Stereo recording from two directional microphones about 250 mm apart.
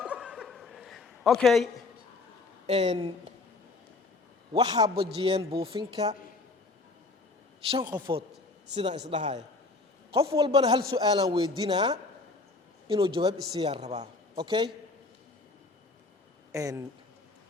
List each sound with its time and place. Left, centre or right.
0.0 s chuckle: centre
2.6 s a man's voice: right
4.5 s a man's voice: centre
7.7 s a man's voice: centre
16.5 s speech: centre